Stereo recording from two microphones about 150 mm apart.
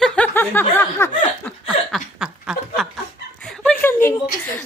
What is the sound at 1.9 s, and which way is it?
Snicker, 5° right (ahead or behind).